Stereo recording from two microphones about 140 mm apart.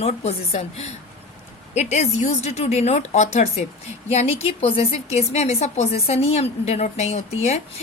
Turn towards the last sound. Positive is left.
turn(degrees=50)  # may be behind; listen again after turning